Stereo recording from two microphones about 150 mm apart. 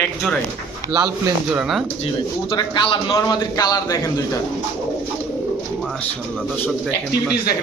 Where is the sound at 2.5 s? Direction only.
30° left (ahead or behind).